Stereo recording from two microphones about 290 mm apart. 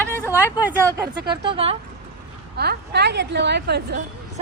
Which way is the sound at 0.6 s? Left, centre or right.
Centre.